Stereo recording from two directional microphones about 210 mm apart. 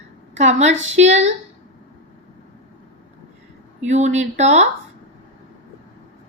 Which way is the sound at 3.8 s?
35° right (ahead or behind).